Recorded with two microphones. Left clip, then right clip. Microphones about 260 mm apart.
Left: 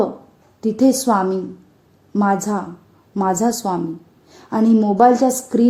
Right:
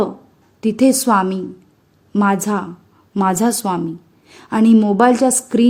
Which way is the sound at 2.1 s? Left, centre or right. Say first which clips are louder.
Right 1 dB; right.